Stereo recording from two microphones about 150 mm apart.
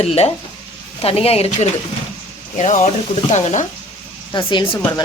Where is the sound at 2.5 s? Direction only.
55° left (ahead or behind).